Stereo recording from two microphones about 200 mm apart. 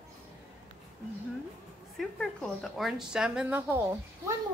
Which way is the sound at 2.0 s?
Centre (ahead or behind).